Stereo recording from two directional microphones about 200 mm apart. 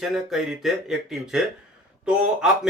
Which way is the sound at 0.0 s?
Centre (ahead or behind).